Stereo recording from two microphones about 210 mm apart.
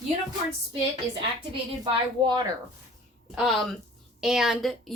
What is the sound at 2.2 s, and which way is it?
Speech, 20° right (ahead or behind).